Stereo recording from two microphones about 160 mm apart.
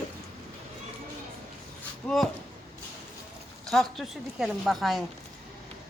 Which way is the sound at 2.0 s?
Centre (ahead or behind).